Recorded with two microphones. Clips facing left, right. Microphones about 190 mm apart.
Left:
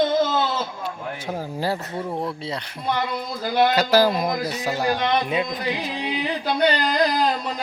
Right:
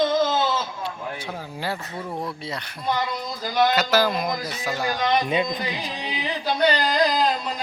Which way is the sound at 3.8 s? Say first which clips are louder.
Left 3 dB; 35° left (ahead or behind).